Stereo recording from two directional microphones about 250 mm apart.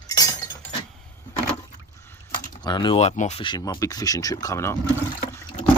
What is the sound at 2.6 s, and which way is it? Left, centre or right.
Speech, centre.